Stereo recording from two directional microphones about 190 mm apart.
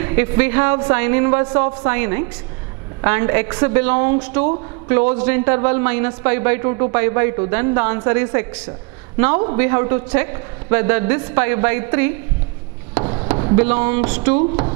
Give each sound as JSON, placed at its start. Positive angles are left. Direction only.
{"t": 0.0, "sound": "a man's voice", "side_deg": -15}
{"t": 13.0, "sound": "chop", "side_deg": -25}
{"t": 13.6, "sound": "a man's voice", "side_deg": -10}